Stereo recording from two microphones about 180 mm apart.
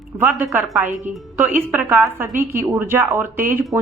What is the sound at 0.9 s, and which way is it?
Speech, 40° right (ahead or behind).